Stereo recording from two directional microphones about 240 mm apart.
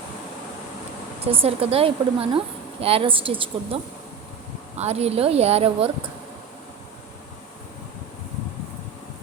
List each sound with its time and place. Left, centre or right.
1.3 s a woman's voice: right
4.8 s a woman's voice: right